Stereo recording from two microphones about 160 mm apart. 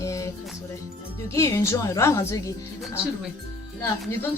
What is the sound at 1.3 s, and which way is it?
A woman's voice, 20° left (ahead or behind).